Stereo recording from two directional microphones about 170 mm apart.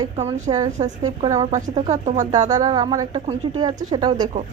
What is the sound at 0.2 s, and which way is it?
Speech, 40° right (ahead or behind).